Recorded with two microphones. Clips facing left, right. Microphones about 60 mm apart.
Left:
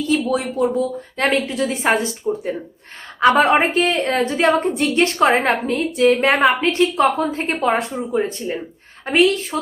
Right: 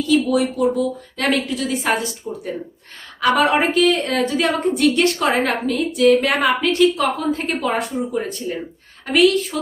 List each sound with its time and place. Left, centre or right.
0.1 s a woman's voice: left